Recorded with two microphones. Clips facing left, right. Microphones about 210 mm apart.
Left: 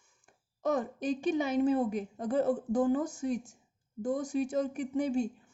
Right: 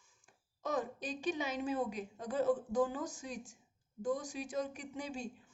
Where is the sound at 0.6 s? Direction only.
55° left (ahead or behind).